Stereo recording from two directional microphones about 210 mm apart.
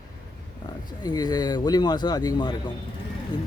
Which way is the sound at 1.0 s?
20° left (ahead or behind).